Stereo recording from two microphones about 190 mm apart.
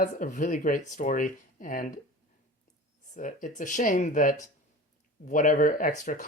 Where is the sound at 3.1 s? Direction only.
40° left (ahead or behind).